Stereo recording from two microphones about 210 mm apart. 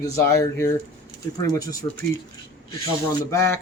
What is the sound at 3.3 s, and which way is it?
Speech, 10° left (ahead or behind).